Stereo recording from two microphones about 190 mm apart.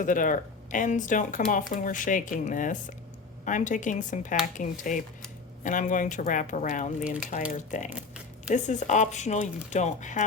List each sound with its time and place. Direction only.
0.0 s speech: 45° left (ahead or behind)
7.9 s a sound: 5° right (ahead or behind)
8.5 s speech: 40° left (ahead or behind)